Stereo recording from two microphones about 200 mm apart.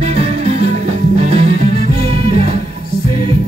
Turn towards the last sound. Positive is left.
turn(degrees=-35)  # may be behind; listen again after turning